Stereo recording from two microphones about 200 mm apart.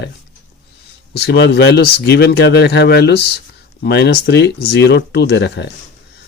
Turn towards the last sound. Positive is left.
turn(degrees=60)  # may be behind; listen again after turning